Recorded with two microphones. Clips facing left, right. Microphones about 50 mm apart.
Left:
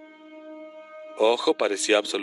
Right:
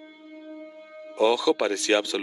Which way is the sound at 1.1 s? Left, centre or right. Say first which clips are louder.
Even; centre.